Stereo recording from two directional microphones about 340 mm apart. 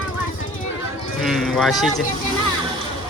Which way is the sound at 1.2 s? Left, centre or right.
Centre.